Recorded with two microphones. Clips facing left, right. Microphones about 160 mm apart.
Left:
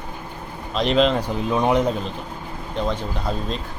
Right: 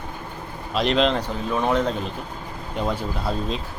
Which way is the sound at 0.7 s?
Centre (ahead or behind).